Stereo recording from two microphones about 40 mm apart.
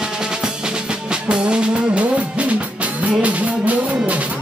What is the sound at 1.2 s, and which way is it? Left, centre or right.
Music, right.